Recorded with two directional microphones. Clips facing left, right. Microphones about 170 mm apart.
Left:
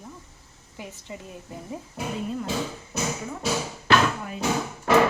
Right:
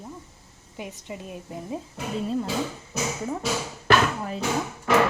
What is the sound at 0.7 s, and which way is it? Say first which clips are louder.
Speech: right 3 dB; 20° right (ahead or behind).